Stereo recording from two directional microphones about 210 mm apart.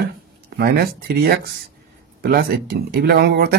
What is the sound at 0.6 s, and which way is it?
Speech, 45° right (ahead or behind).